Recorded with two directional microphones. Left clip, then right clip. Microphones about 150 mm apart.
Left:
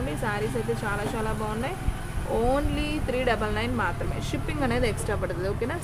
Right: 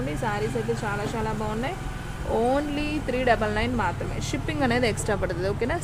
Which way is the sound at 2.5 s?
25° right (ahead or behind).